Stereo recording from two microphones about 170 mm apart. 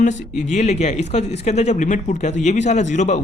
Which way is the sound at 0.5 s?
40° left (ahead or behind).